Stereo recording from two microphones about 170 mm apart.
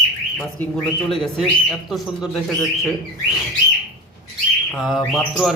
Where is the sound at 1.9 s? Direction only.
Centre (ahead or behind).